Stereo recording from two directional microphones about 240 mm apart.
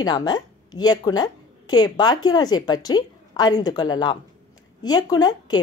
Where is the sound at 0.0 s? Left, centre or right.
Centre.